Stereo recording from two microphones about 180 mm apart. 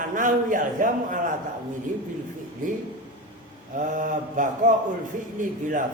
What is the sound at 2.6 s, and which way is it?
A man's voice, 45° right (ahead or behind).